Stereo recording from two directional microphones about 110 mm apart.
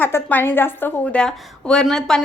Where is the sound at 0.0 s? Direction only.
20° left (ahead or behind).